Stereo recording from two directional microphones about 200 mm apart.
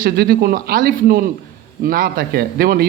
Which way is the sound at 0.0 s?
50° right (ahead or behind).